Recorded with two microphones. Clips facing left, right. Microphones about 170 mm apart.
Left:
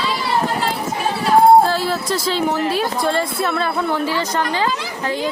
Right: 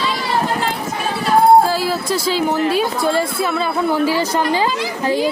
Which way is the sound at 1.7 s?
5° right (ahead or behind).